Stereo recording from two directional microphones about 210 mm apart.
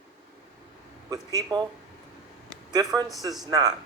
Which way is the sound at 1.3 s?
20° right (ahead or behind).